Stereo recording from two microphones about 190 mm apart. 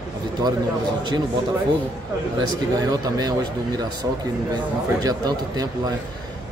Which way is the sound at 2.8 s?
20° right (ahead or behind).